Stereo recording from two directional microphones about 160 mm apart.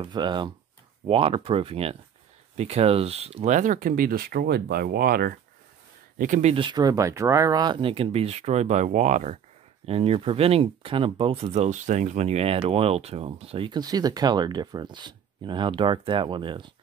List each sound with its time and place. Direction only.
0.0 s speech: 30° right (ahead or behind); by 5.3 s 70° right (ahead or behind)
6.1 s speech: 55° right (ahead or behind)
6.5 s speech: 30° right (ahead or behind)